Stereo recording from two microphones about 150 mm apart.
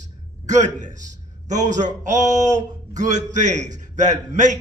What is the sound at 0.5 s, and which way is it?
A man's voice, 55° right (ahead or behind).